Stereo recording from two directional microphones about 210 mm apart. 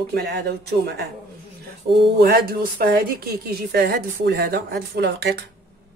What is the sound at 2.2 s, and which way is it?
A woman's voice, 45° right (ahead or behind).